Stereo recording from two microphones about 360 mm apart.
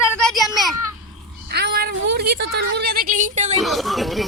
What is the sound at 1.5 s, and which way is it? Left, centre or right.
Speech, right.